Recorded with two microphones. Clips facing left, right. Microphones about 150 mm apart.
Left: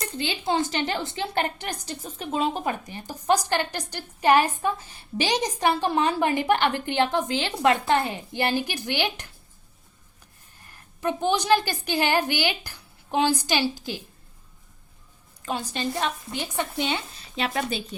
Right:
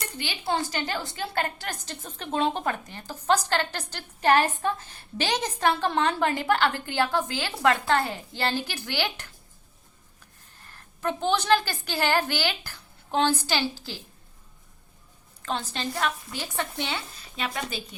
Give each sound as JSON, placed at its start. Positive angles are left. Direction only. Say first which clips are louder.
{"t": 0.2, "sound": "a woman's voice", "louder": "left 3 dB", "side_deg": 20}
{"t": 10.7, "sound": "a woman's voice", "louder": "left 2 dB", "side_deg": 15}
{"t": 15.4, "sound": "a woman's voice", "louder": "left 2 dB", "side_deg": 15}